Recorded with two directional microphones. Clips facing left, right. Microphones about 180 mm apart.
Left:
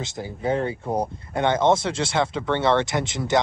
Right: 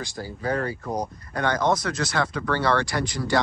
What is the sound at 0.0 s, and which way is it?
Speech, 20° left (ahead or behind).